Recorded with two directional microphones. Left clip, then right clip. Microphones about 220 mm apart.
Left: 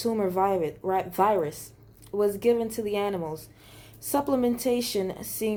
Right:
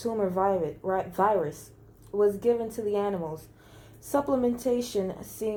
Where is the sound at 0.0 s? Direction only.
35° left (ahead or behind).